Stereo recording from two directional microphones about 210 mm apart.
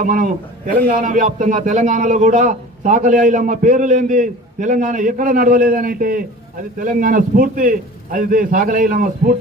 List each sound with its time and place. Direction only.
0.0 s a man's voice: 40° right (ahead or behind)